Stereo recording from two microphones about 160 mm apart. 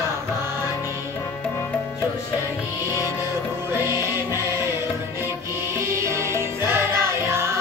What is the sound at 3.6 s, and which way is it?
Music, 15° right (ahead or behind).